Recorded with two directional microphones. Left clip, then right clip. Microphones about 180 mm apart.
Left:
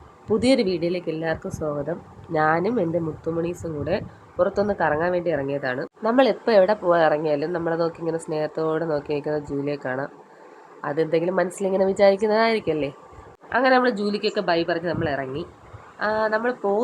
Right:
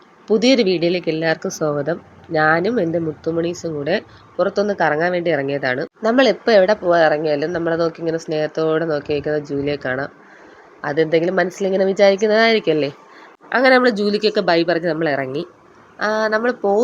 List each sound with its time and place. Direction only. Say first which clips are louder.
0.3 s speech: right 5 dB; 5° right (ahead or behind)
2.3 s speech: right 5 dB; 5° right (ahead or behind)
3.8 s speech: right 5 dB; 10° right (ahead or behind)